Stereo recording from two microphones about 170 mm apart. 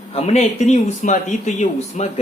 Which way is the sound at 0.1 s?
40° left (ahead or behind).